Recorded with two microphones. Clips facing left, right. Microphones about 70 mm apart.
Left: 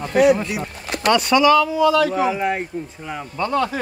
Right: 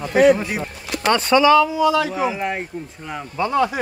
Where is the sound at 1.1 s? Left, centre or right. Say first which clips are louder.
Even; right.